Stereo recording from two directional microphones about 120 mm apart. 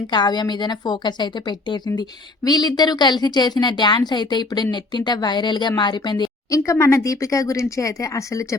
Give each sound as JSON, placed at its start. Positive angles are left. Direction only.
{"t": 0.1, "sound": "a woman's voice", "side_deg": 40}
{"t": 6.6, "sound": "speech", "side_deg": 25}